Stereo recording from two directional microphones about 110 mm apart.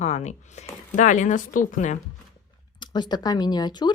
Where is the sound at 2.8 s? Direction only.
40° left (ahead or behind).